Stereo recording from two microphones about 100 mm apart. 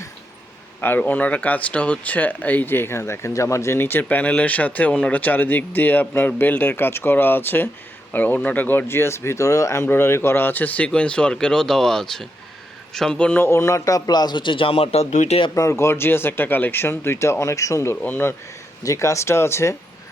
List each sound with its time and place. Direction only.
0.8 s speech: 20° left (ahead or behind)
13.4 s a man's voice: 30° left (ahead or behind); by 15.4 s 85° left
15.5 s speech: 30° left (ahead or behind)
18.0 s speech: 20° left (ahead or behind)
18.8 s speech: 30° left (ahead or behind)